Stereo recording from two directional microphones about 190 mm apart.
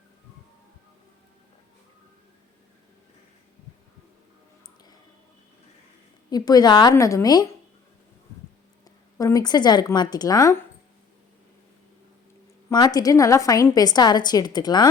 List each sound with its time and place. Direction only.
6.3 s a woman's voice: 20° left (ahead or behind)
9.1 s a woman's voice: 20° left (ahead or behind)
12.7 s a woman's voice: 20° left (ahead or behind)